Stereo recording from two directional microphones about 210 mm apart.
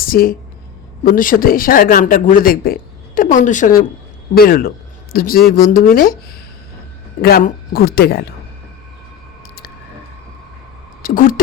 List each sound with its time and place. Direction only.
0.0 s speech: 45° left (ahead or behind)
7.2 s speech: 45° left (ahead or behind)
11.0 s speech: 40° left (ahead or behind)